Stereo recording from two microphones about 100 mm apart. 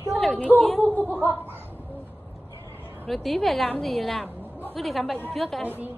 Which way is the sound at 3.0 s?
Centre (ahead or behind).